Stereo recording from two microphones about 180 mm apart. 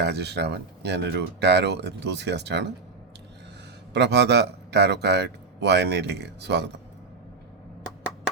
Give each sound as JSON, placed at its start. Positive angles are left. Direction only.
{"t": 0.0, "sound": "speech", "side_deg": -70}
{"t": 3.9, "sound": "speech", "side_deg": -70}